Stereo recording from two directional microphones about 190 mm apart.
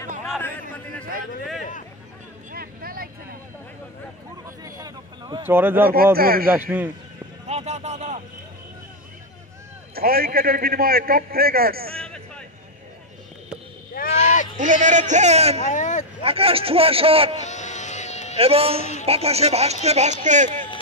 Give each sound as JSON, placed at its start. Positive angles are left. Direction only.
{"t": 1.6, "sound": "a sound", "side_deg": 40}
{"t": 2.5, "sound": "vehicle", "side_deg": -50}
{"t": 4.6, "sound": "a sound", "side_deg": -20}
{"t": 6.1, "sound": "a man's voice", "side_deg": -50}
{"t": 6.5, "sound": "a man's voice", "side_deg": -10}
{"t": 7.4, "sound": "vehicle", "side_deg": -35}
{"t": 9.9, "sound": "a man's voice", "side_deg": -50}
{"t": 11.9, "sound": "a sound", "side_deg": 5}
{"t": 14.1, "sound": "a sound", "side_deg": 40}
{"t": 14.6, "sound": "speech", "side_deg": -40}
{"t": 15.6, "sound": "speech", "side_deg": 40}
{"t": 16.2, "sound": "a man's voice", "side_deg": -30}
{"t": 17.5, "sound": "sheep", "side_deg": 40}
{"t": 18.4, "sound": "speech", "side_deg": -30}